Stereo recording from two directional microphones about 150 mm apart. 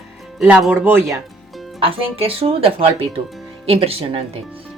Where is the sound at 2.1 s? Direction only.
40° right (ahead or behind).